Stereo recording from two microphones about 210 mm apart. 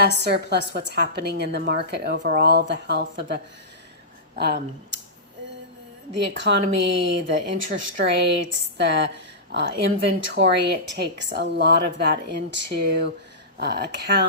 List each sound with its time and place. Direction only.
0.0 s a woman's voice: 50° right (ahead or behind)
6.2 s speech: 55° right (ahead or behind)
10.2 s a woman's voice: 60° right (ahead or behind)